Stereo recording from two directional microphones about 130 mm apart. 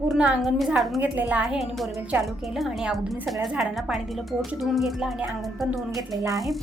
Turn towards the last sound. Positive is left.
turn(degrees=0)  # may be behind; listen again after turning